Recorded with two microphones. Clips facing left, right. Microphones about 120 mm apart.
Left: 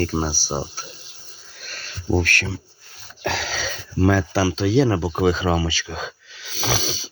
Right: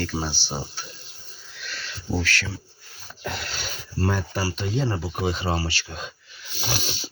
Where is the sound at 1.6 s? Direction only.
45° left (ahead or behind).